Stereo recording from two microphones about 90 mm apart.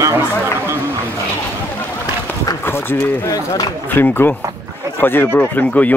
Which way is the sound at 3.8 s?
20° left (ahead or behind).